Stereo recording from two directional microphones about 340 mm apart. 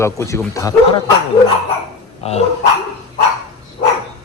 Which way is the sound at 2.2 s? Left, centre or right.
Centre.